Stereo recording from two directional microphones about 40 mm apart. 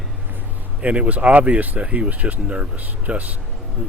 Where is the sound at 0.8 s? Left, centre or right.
Right.